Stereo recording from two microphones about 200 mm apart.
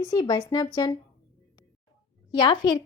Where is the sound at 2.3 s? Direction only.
25° left (ahead or behind).